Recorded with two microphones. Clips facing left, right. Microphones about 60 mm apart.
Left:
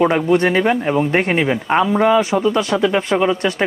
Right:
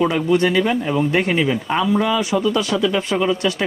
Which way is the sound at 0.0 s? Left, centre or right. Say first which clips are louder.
Left 2 dB; left.